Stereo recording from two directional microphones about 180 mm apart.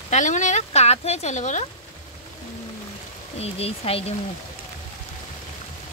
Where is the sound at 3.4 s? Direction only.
35° left (ahead or behind).